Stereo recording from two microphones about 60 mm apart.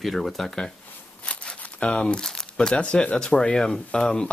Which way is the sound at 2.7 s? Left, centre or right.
Centre.